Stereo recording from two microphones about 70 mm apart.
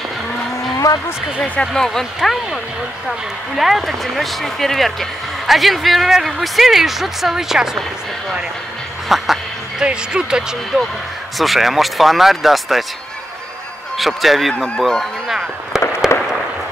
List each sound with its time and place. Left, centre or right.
0.8 s speech: left
1.4 s speech: centre
9.1 s duck: centre
9.8 s speech: centre
11.3 s speech: centre
13.9 s speech: centre
16.1 s fireworks: left